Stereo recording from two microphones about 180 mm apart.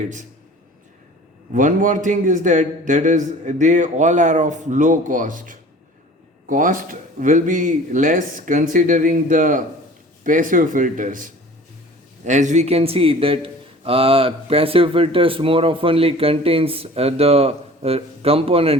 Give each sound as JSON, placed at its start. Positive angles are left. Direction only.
{"t": 1.5, "sound": "a man's voice", "side_deg": -45}